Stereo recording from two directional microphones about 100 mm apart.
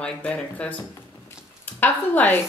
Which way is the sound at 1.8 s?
20° left (ahead or behind).